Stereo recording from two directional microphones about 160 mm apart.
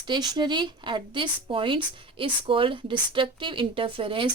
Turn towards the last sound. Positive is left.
turn(degrees=-35)  # may be behind; listen again after turning